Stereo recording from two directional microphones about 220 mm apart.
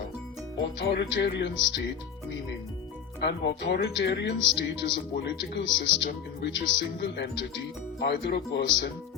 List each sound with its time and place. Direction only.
0.8 s speech: 50° left (ahead or behind)
3.2 s speech: 50° left (ahead or behind)